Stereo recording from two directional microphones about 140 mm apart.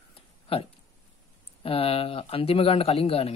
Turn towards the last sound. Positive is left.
turn(degrees=45)  # may be behind; listen again after turning